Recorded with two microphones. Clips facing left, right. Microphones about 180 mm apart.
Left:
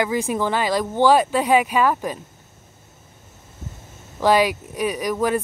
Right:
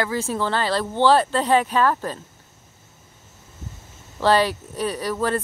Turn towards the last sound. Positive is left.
turn(degrees=10)  # may be behind; listen again after turning